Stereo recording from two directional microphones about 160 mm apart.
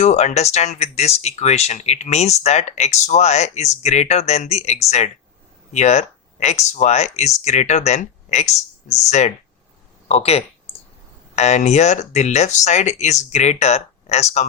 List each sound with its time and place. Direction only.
0.0 s speech: 45° left (ahead or behind)